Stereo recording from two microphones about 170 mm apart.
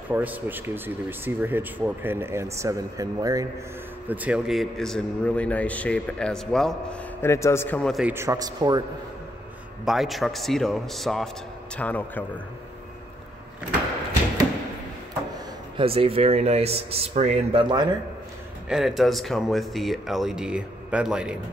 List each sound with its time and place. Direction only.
0.1 s speech: 10° right (ahead or behind)
4.1 s a man's voice: 10° right (ahead or behind)
8.1 s a man's voice: 15° right (ahead or behind)
9.8 s a man's voice: centre (ahead or behind)
15.8 s speech: 35° right (ahead or behind)
18.7 s speech: centre (ahead or behind)